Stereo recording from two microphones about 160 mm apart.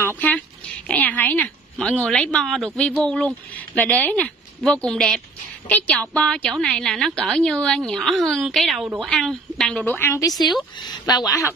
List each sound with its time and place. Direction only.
0.0 s a woman's voice: 10° left (ahead or behind)